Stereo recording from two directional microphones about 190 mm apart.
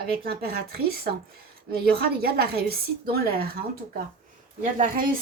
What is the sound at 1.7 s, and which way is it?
Speech, 55° right (ahead or behind).